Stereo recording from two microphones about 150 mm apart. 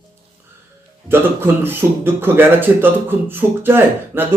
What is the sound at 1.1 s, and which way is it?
A man's voice, 15° right (ahead or behind).